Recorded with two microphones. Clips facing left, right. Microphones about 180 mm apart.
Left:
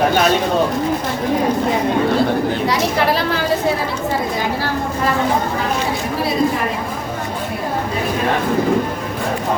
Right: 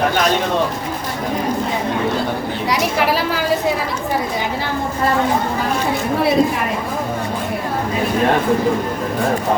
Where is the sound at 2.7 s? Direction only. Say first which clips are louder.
Right 3 dB; 10° right (ahead or behind).